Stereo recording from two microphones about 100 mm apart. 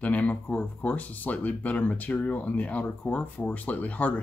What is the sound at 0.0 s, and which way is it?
Speech, 15° left (ahead or behind).